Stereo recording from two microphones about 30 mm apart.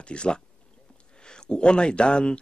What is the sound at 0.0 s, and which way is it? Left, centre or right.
Speech, left.